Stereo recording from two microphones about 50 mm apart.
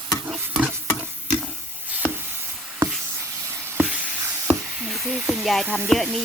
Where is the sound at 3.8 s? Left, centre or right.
Right.